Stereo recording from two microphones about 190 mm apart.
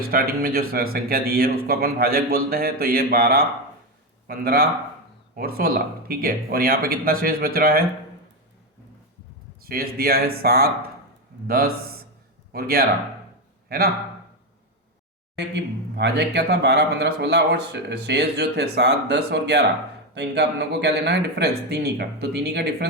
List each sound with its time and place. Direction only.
0.1 s speech: 50° right (ahead or behind)
9.6 s a man's voice: 55° right (ahead or behind)
15.4 s speech: 65° right (ahead or behind)